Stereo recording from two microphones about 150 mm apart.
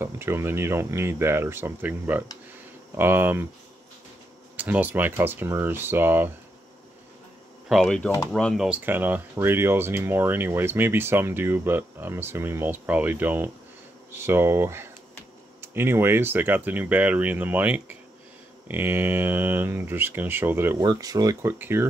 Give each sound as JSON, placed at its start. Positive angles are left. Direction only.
{"t": 0.0, "sound": "speech", "side_deg": -15}
{"t": 4.6, "sound": "speech", "side_deg": -10}
{"t": 7.6, "sound": "speech", "side_deg": 0}
{"t": 8.6, "sound": "speech", "side_deg": -10}
{"t": 20.8, "sound": "speech", "side_deg": -25}